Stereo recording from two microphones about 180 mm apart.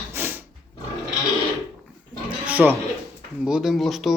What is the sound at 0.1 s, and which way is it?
Roaring cats, 10° right (ahead or behind).